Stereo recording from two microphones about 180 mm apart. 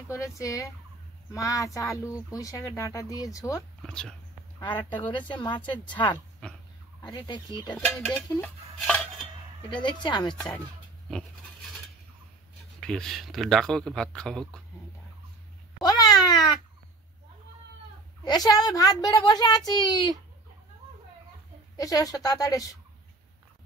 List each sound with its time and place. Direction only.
0.1 s speech: 15° left (ahead or behind)
3.8 s speech: 5° left (ahead or behind)
5.4 s a child's voice: 25° left (ahead or behind)
6.4 s dog: 5° left (ahead or behind)
7.2 s a child's voice: 25° left (ahead or behind)
7.7 s speech: 5° left (ahead or behind)
8.7 s a sound: 5° left (ahead or behind)
9.7 s a child's voice: 25° left (ahead or behind)
11.1 s a sound: centre (ahead or behind)
12.8 s speech: 5° left (ahead or behind)
15.8 s cat: 20° left (ahead or behind)
18.2 s a child's voice: 20° left (ahead or behind)
21.7 s a child's voice: 20° left (ahead or behind)